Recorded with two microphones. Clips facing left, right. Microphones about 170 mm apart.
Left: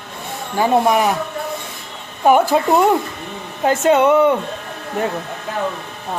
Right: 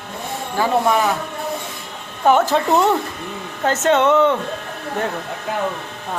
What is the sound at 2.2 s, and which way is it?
Speech, 10° left (ahead or behind).